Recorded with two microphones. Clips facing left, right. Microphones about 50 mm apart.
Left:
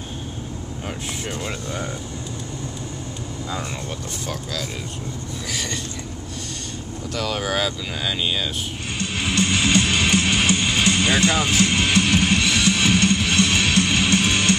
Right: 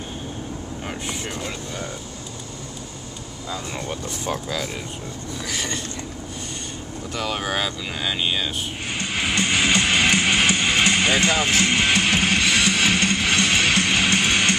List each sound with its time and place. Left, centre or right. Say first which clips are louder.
5.5 s speech: even; centre
7.2 s speech: left 1 dB; centre
8.9 s music: even; right